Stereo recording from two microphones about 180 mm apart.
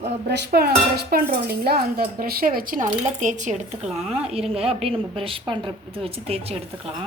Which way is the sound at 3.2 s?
45° right (ahead or behind).